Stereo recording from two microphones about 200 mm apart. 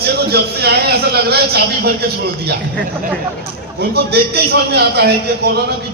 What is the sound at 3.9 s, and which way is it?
A man's voice, 55° right (ahead or behind).